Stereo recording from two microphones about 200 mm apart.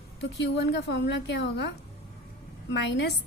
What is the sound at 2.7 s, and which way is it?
Speech, 60° left (ahead or behind).